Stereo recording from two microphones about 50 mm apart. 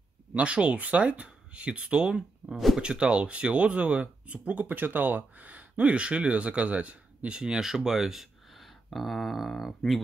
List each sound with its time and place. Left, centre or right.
0.3 s speech: right
2.5 s speech: centre
2.8 s speech: centre
7.3 s speech: centre